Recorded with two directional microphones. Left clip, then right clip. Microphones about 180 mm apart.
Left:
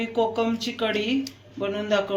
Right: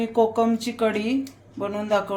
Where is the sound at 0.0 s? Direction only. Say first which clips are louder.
Right 3 dB; 50° right (ahead or behind).